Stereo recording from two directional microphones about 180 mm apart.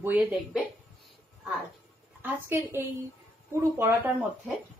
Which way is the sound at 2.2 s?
10° right (ahead or behind).